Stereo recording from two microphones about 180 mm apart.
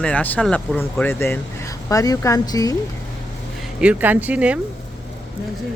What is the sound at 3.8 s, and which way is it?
Speech, 5° right (ahead or behind).